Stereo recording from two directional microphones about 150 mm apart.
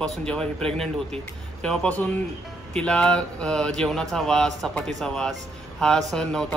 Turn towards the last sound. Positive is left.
turn(degrees=5)  # may be behind; listen again after turning